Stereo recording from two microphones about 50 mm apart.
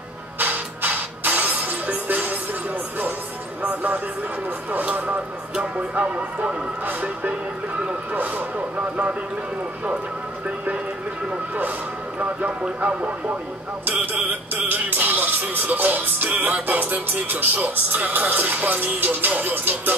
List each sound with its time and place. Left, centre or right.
0.4 s music: right
3.6 s music: right
4.7 s speech: right
12.2 s speech: right
13.8 s music: right